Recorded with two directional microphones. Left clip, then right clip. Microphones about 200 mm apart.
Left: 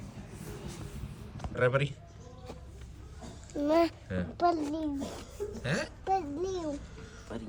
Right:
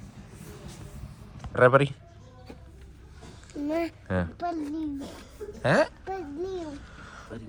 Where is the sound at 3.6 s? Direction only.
20° left (ahead or behind).